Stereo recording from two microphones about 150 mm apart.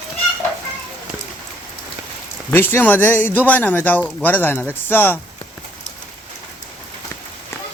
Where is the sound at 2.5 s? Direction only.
15° left (ahead or behind).